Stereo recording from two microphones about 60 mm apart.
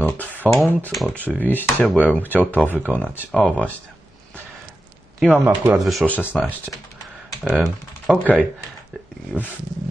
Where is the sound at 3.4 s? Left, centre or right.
Centre.